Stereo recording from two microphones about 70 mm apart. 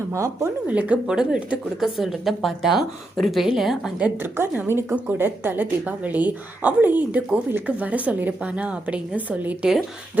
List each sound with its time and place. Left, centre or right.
0.7 s a woman's voice: right
1.0 s speech: centre
4.7 s a woman's voice: right